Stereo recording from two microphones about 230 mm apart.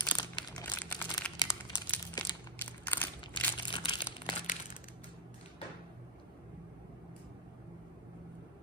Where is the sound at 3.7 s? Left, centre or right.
Left.